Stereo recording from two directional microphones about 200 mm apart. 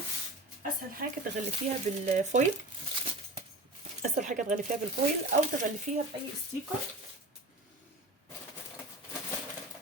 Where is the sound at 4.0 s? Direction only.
40° right (ahead or behind).